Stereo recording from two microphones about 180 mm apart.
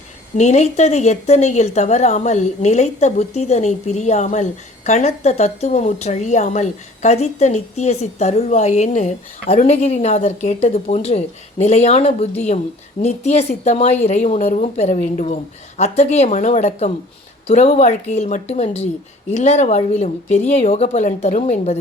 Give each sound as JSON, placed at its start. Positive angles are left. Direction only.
{"t": 0.3, "sound": "a woman's voice", "side_deg": 40}